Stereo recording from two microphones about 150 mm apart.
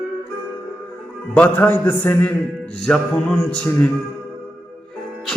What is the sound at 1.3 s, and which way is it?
A man's voice, 10° left (ahead or behind).